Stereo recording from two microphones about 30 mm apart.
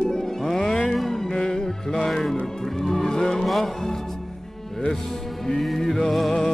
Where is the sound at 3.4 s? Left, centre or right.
Centre.